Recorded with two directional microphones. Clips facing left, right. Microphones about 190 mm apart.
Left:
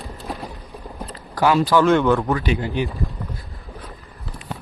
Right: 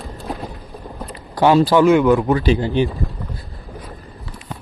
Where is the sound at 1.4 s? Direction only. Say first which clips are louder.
Right 4 dB; 30° right (ahead or behind).